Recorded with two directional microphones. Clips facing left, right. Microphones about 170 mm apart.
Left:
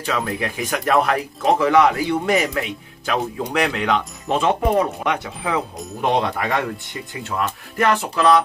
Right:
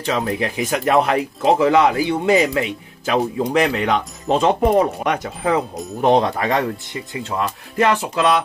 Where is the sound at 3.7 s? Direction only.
35° right (ahead or behind).